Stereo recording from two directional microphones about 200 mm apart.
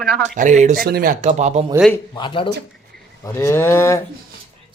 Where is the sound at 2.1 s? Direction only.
25° left (ahead or behind).